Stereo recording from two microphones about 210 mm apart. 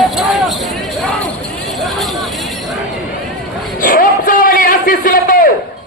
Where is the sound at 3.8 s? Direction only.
40° left (ahead or behind).